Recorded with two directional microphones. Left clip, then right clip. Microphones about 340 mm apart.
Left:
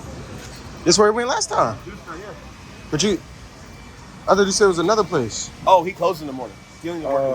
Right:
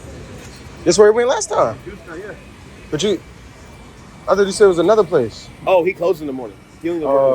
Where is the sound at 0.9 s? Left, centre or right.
Centre.